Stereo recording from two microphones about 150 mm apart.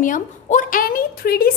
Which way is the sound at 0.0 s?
60° left (ahead or behind).